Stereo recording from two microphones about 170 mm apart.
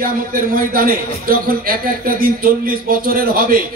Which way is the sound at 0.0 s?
55° right (ahead or behind).